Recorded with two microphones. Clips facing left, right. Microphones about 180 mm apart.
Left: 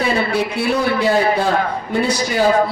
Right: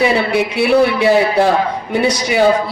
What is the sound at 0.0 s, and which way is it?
A man's voice, 70° right (ahead or behind).